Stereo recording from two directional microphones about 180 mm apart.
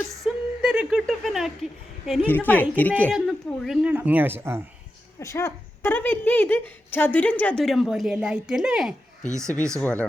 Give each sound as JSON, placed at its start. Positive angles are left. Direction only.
{"t": 0.3, "sound": "speech", "side_deg": -5}
{"t": 2.2, "sound": "a woman's voice", "side_deg": 10}
{"t": 5.2, "sound": "a woman's voice", "side_deg": 15}
{"t": 9.4, "sound": "speech", "side_deg": -15}
{"t": 9.7, "sound": "a woman's voice", "side_deg": 5}